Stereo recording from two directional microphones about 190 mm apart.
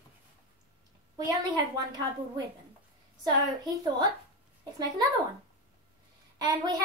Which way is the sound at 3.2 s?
20° right (ahead or behind).